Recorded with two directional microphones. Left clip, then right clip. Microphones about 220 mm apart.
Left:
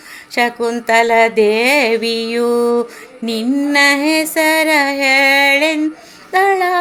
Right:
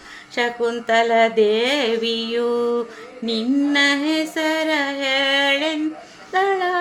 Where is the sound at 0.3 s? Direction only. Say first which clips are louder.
Left 5 dB; 25° left (ahead or behind).